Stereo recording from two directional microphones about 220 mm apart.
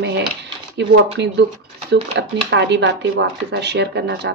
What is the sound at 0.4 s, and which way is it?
Speech, 50° right (ahead or behind).